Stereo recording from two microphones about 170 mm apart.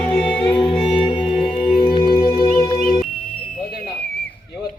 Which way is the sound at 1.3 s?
Centre (ahead or behind).